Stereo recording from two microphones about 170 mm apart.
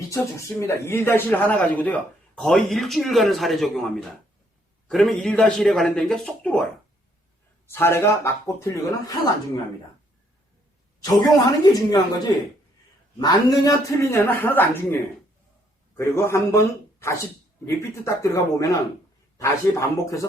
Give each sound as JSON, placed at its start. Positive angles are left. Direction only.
{"t": 0.1, "sound": "a man's voice", "side_deg": 15}
{"t": 7.7, "sound": "a man's voice", "side_deg": 15}
{"t": 11.0, "sound": "speech", "side_deg": 20}
{"t": 13.1, "sound": "a man's voice", "side_deg": 20}
{"t": 17.7, "sound": "speech", "side_deg": 15}